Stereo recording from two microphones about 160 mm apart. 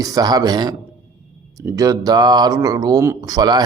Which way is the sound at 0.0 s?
25° right (ahead or behind).